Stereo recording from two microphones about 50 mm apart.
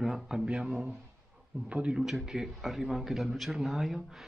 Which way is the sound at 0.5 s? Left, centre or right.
Centre.